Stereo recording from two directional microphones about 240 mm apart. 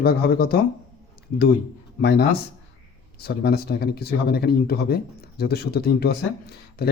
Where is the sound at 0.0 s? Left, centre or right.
Left.